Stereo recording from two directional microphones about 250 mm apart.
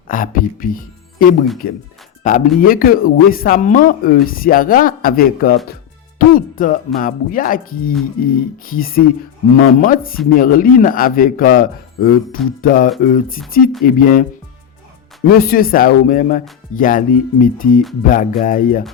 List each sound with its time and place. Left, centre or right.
0.1 s speech: left
15.3 s speech: left